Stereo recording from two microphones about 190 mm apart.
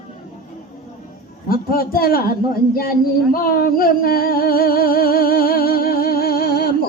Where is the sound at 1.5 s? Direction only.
50° left (ahead or behind).